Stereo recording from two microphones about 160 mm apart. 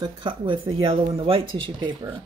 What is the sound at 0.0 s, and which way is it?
Speech, 30° right (ahead or behind).